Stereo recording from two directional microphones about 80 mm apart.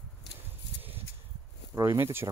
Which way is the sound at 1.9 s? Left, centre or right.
Right.